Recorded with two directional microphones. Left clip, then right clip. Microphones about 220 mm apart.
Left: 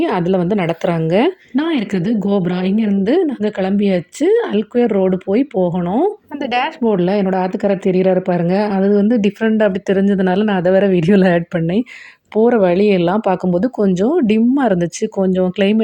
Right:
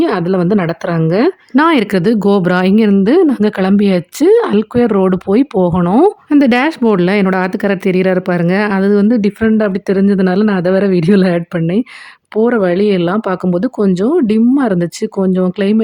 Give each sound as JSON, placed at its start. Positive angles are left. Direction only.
{"t": 0.0, "sound": "a woman's voice", "side_deg": -20}